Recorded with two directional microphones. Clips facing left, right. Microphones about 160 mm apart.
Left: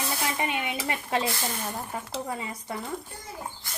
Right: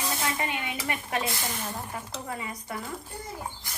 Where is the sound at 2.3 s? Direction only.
25° left (ahead or behind).